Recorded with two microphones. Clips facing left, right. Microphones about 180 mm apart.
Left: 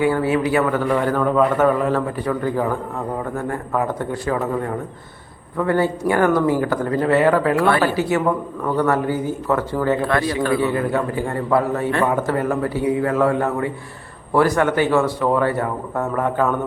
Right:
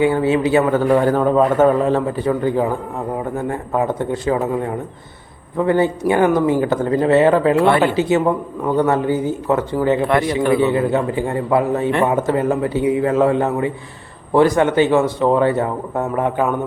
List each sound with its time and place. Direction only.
0.0 s speech: 25° right (ahead or behind)